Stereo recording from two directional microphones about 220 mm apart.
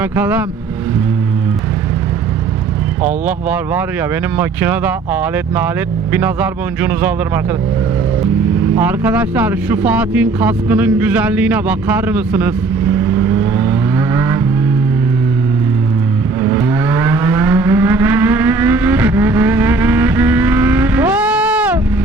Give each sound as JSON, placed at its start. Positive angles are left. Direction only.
{"t": 0.0, "sound": "speech", "side_deg": -5}
{"t": 3.2, "sound": "speech", "side_deg": -5}
{"t": 8.8, "sound": "speech", "side_deg": -5}
{"t": 16.4, "sound": "vehicle", "side_deg": -10}